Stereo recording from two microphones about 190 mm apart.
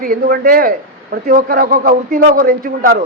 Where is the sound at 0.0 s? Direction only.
50° right (ahead or behind).